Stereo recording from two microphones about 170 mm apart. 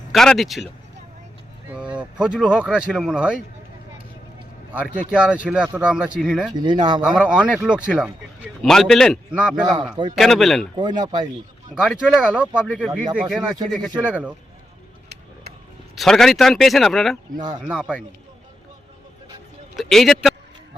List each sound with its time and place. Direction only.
0.1 s speech: centre (ahead or behind)
1.7 s speech: 5° right (ahead or behind)
5.1 s speech: 5° right (ahead or behind)
6.5 s speech: 25° right (ahead or behind)
7.0 s speech: 5° right (ahead or behind)
10.8 s speech: 25° right (ahead or behind)
11.7 s speech: 5° right (ahead or behind)
16.0 s speech: 5° left (ahead or behind)
17.3 s speech: 25° right (ahead or behind)
17.6 s speech: 5° right (ahead or behind)
19.7 s speech: centre (ahead or behind)